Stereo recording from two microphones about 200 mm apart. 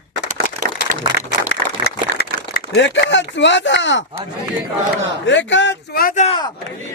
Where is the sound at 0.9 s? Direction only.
45° right (ahead or behind).